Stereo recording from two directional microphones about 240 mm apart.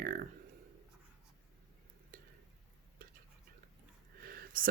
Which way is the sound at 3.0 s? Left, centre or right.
Right.